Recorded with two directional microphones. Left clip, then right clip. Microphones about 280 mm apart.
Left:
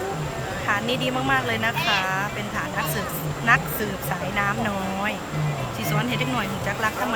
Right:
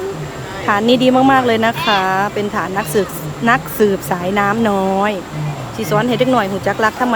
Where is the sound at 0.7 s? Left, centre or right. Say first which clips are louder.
Right 12 dB; centre.